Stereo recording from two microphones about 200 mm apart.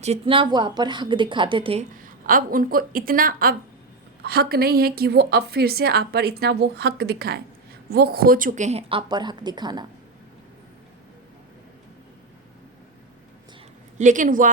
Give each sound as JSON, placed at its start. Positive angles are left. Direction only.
{"t": 0.0, "sound": "a woman's voice", "side_deg": -30}
{"t": 2.0, "sound": "a woman's voice", "side_deg": -45}
{"t": 14.0, "sound": "a woman's voice", "side_deg": -40}